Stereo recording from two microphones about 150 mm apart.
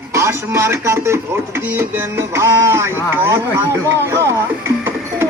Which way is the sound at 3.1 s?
20° right (ahead or behind).